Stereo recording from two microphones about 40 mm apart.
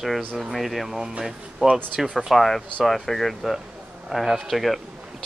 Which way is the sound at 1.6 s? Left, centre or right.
Right.